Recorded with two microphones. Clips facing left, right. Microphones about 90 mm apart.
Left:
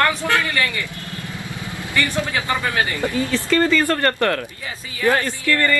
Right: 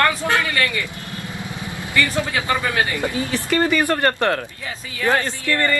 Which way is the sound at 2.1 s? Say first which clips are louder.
Right 1 dB; 15° right (ahead or behind).